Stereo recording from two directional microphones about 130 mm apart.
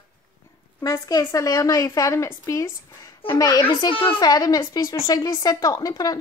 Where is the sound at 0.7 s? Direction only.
30° left (ahead or behind).